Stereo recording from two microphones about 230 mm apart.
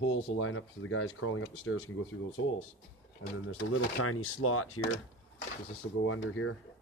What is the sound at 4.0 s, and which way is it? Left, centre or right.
Speech, left.